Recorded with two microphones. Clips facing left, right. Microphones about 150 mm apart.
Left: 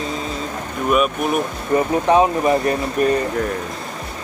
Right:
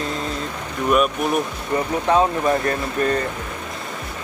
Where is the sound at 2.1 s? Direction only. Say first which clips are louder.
Left 2 dB; 15° left (ahead or behind).